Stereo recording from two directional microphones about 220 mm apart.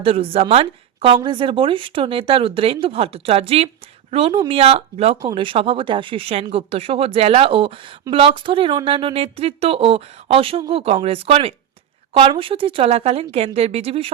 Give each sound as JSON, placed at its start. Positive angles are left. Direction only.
{"t": 0.0, "sound": "speech", "side_deg": -25}